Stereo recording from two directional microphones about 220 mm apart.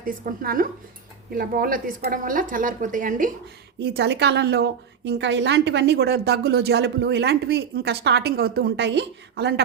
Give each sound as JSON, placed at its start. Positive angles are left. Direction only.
{"t": 0.0, "sound": "a woman's voice", "side_deg": -40}
{"t": 3.8, "sound": "a woman's voice", "side_deg": -50}